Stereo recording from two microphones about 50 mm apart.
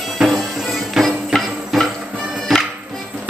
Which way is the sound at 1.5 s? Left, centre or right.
Centre.